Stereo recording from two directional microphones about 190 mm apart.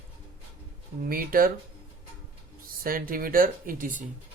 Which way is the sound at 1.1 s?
50° right (ahead or behind).